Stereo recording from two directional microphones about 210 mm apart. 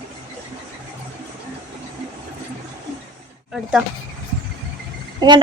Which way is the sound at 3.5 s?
5° right (ahead or behind).